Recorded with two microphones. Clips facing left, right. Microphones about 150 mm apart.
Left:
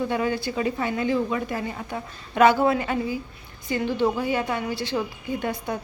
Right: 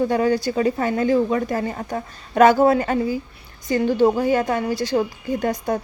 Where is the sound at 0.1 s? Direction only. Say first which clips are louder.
Right 6 dB; 40° right (ahead or behind).